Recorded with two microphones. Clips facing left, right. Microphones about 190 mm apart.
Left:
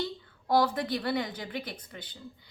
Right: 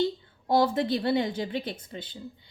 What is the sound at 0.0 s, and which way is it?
A woman's voice, 25° right (ahead or behind).